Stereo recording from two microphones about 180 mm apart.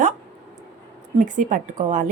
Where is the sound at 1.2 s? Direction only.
45° right (ahead or behind).